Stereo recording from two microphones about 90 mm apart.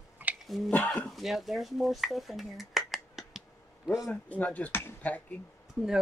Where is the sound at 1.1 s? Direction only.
Centre (ahead or behind).